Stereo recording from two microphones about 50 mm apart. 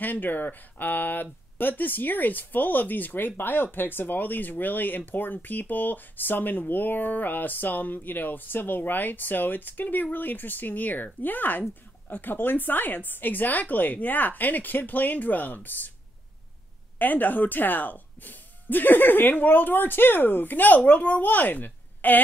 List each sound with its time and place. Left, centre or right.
0.0 s speech: left
17.0 s speech: left